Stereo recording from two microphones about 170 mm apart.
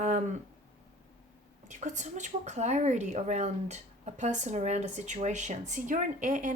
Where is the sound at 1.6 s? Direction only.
45° right (ahead or behind).